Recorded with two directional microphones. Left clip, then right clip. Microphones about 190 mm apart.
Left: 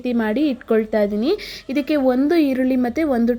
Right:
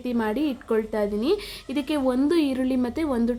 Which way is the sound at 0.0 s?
15° left (ahead or behind).